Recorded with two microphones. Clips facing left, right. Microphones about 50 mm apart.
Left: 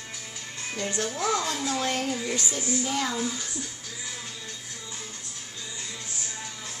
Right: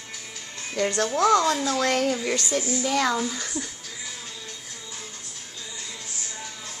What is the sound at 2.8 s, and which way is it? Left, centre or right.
Speech, right.